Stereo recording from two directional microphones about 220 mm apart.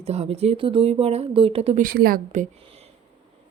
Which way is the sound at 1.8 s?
40° right (ahead or behind).